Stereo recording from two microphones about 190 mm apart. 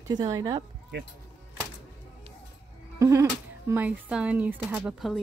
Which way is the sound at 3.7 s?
5° right (ahead or behind).